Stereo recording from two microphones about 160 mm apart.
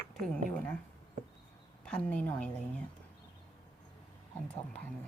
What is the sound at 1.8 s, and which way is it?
Speech, 10° left (ahead or behind).